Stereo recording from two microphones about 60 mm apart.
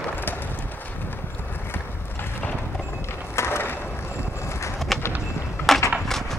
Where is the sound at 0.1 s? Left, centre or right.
Left.